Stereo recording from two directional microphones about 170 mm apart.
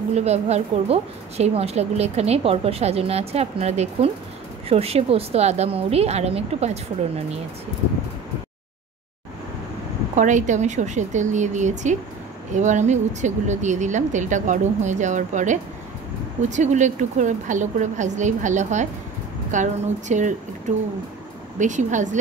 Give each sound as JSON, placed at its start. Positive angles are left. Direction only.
{"t": 0.1, "sound": "a woman's voice", "side_deg": -40}
{"t": 10.1, "sound": "a woman's voice", "side_deg": -45}